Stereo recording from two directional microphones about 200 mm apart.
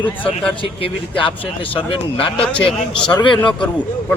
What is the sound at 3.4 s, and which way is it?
Speech, 5° left (ahead or behind).